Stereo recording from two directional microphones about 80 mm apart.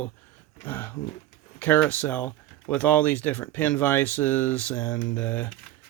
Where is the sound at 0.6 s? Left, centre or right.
Left.